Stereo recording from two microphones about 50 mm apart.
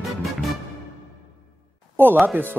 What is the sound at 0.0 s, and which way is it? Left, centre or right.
Music, centre.